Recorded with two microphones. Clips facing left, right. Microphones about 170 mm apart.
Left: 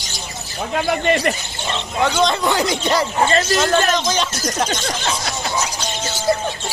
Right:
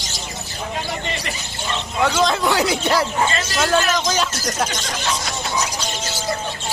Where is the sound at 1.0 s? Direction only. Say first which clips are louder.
Left 11 dB; 60° left (ahead or behind).